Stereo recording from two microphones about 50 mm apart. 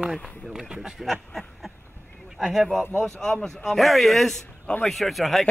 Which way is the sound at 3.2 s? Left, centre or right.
Centre.